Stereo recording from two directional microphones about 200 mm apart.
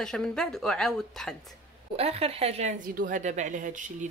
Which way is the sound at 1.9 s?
30° right (ahead or behind).